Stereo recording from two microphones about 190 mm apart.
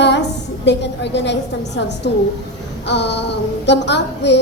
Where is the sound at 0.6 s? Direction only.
65° left (ahead or behind).